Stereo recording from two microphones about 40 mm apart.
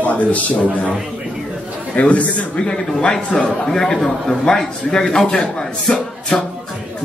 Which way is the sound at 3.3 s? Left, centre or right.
Left.